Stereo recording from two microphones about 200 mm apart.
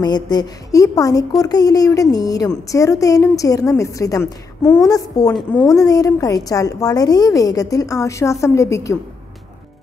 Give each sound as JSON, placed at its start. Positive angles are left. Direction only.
{"t": 0.0, "sound": "a woman's voice", "side_deg": 20}